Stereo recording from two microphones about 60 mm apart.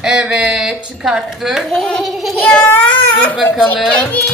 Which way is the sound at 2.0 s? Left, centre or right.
Centre.